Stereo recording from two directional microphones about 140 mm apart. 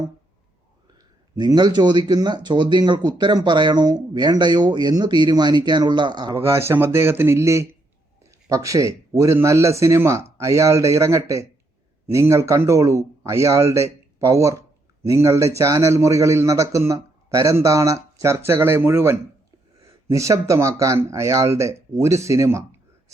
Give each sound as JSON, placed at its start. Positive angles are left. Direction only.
{"t": 1.4, "sound": "speech", "side_deg": -30}
{"t": 6.3, "sound": "a man's voice", "side_deg": -20}